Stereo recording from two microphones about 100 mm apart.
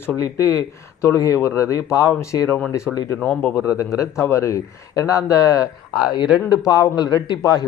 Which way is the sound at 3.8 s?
30° left (ahead or behind).